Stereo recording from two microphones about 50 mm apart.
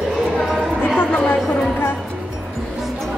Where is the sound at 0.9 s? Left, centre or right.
Left.